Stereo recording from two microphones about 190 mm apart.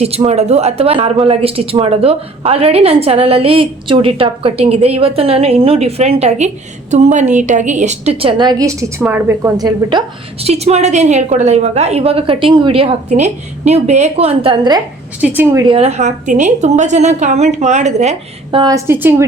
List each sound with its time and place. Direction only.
0.0 s a woman's voice: 35° right (ahead or behind); by 9.5 s 10° right (ahead or behind)
9.6 s a woman's voice: 20° right (ahead or behind)
10.4 s a woman's voice: 35° right (ahead or behind)
15.2 s a woman's voice: 10° right (ahead or behind)
15.6 s a woman's voice: 30° right (ahead or behind)
18.6 s a woman's voice: 15° right (ahead or behind)